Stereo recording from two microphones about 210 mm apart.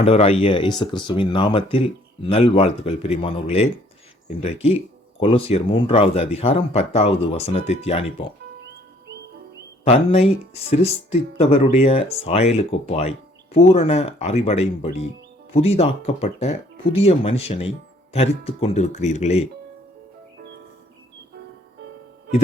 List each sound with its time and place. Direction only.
0.0 s speech: 30° left (ahead or behind)
9.8 s speech: 30° left (ahead or behind)